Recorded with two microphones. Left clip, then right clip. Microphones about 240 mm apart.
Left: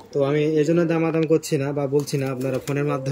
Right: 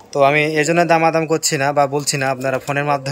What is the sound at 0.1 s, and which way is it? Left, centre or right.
A man's voice, centre.